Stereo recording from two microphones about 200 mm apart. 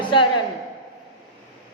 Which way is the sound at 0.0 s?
25° left (ahead or behind).